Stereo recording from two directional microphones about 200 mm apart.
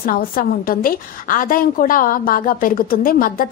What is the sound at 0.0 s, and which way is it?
A woman's voice, 45° left (ahead or behind).